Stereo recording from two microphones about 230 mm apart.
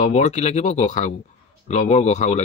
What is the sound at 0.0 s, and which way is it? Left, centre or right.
Speech, left.